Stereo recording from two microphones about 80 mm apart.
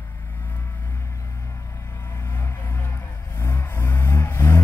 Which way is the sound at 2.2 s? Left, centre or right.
Left.